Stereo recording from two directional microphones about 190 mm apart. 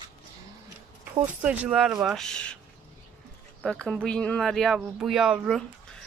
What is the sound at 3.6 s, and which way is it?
Speech, 5° left (ahead or behind).